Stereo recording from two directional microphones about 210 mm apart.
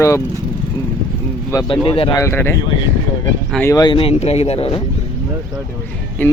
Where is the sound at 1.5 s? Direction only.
20° left (ahead or behind).